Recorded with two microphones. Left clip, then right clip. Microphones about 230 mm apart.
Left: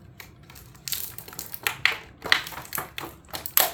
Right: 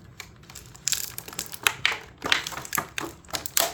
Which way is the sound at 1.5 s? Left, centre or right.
Right.